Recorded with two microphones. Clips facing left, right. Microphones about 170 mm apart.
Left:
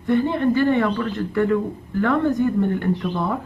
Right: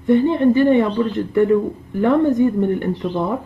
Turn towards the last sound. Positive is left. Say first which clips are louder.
# right 2 dB
turn(degrees=-20)  # may be behind; listen again after turning